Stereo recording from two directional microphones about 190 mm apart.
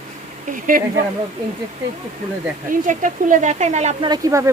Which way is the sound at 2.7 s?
45° right (ahead or behind).